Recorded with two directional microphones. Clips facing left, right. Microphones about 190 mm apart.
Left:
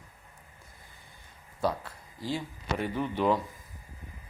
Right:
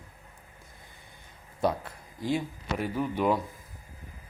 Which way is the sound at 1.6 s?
20° right (ahead or behind).